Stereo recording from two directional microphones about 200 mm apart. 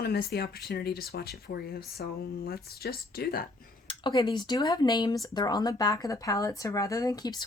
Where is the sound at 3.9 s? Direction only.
20° left (ahead or behind).